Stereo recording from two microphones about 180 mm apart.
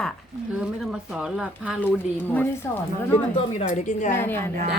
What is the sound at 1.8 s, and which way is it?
A woman's voice, 10° left (ahead or behind).